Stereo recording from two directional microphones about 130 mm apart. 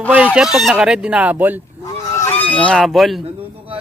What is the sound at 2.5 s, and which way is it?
Speech, 10° left (ahead or behind).